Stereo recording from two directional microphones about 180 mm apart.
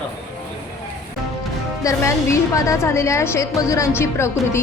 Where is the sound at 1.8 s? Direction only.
15° left (ahead or behind).